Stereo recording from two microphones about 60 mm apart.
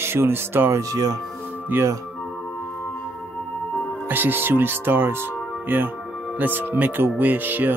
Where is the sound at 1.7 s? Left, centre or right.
Right.